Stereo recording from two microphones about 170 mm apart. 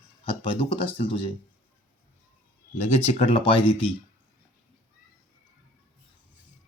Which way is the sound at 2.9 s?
40° left (ahead or behind).